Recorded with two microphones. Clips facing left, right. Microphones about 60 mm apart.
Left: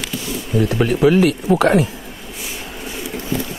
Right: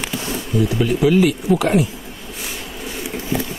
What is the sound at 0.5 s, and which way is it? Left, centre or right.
Speech, left.